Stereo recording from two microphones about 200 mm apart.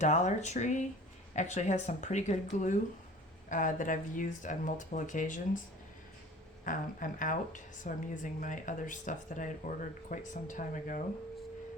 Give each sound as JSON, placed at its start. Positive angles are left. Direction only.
{"t": 0.0, "sound": "a woman's voice", "side_deg": 35}
{"t": 6.7, "sound": "a woman's voice", "side_deg": 40}